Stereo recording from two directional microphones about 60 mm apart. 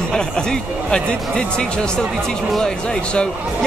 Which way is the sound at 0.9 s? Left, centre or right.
Centre.